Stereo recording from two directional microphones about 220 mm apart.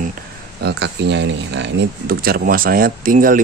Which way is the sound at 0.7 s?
50° right (ahead or behind).